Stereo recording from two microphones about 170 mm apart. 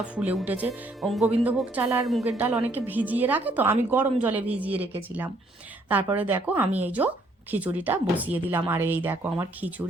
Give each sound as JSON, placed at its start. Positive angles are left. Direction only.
{"t": 0.0, "sound": "speech", "side_deg": -5}